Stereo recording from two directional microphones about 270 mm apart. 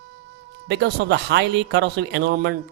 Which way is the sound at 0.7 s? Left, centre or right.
Right.